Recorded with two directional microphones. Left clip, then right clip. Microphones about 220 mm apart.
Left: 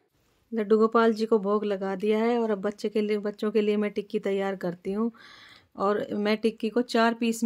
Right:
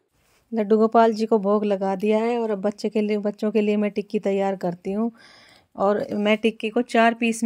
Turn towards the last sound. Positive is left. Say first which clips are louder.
# right 5 dB
turn(degrees=-10)  # may be behind; listen again after turning